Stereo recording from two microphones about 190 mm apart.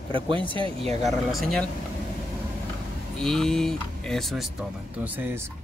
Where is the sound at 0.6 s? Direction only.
30° right (ahead or behind).